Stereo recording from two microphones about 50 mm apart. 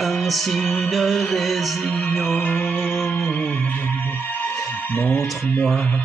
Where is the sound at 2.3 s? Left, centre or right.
Left.